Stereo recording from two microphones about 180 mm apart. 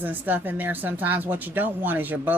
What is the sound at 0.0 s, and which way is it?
Speech, 10° right (ahead or behind).